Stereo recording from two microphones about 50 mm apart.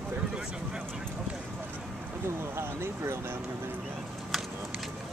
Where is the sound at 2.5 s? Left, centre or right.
Right.